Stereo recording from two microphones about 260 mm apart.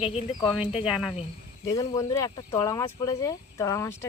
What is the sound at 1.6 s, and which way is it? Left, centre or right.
Speech, centre.